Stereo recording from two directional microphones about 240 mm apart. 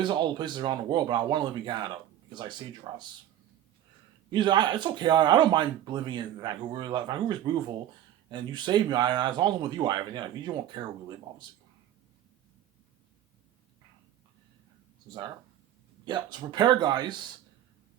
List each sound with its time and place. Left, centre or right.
0.0 s speech: centre
4.3 s speech: centre
16.0 s speech: centre